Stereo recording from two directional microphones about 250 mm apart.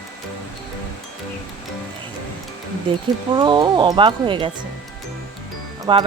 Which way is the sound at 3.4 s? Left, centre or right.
Centre.